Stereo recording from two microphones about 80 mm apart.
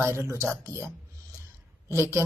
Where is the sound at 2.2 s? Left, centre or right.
Right.